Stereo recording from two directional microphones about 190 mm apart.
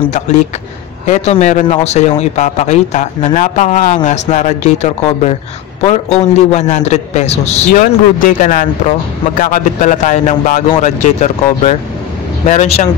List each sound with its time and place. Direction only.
1.0 s speech: 35° left (ahead or behind)